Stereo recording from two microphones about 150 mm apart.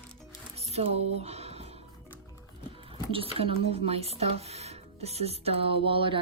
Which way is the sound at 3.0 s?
35° right (ahead or behind).